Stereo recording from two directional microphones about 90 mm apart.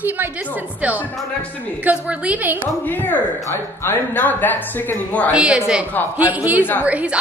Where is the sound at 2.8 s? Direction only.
20° left (ahead or behind).